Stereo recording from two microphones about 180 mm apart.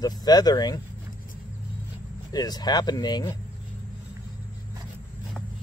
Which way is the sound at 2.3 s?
20° left (ahead or behind).